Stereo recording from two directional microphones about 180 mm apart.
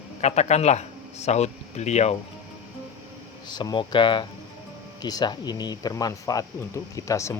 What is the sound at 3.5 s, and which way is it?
Speech, 25° left (ahead or behind).